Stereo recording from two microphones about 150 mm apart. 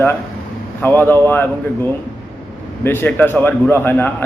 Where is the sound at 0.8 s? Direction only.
15° left (ahead or behind).